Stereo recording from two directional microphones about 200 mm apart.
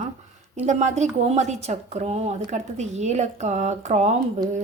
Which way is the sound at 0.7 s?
35° right (ahead or behind).